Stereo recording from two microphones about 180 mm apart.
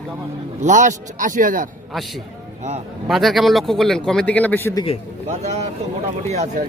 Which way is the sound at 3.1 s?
Centre (ahead or behind).